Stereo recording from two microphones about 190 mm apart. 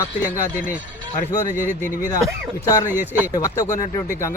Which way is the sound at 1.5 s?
10° right (ahead or behind).